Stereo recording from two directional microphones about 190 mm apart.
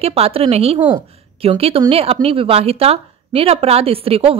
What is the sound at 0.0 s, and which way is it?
A woman's voice, 30° right (ahead or behind).